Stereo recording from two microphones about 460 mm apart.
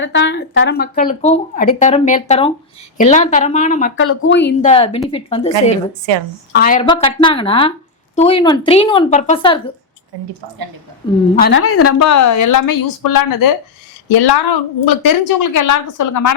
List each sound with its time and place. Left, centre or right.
0.0 s a woman's voice: left
6.1 s a woman's voice: right
6.5 s a woman's voice: centre
11.0 s a woman's voice: centre
11.3 s a woman's voice: left
14.1 s a woman's voice: left